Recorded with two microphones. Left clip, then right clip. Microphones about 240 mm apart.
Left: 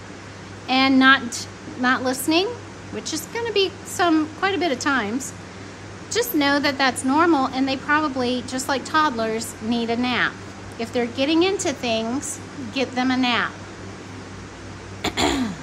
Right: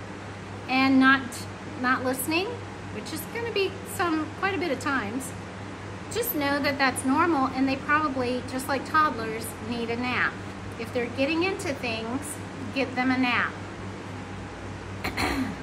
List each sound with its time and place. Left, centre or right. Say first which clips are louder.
0.7 s a woman's voice: left 5 dB; left
6.1 s a woman's voice: left 7 dB; left
15.0 s throat clearing: left 6 dB; left